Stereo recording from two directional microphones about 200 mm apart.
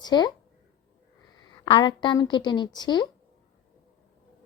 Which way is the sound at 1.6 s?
25° left (ahead or behind).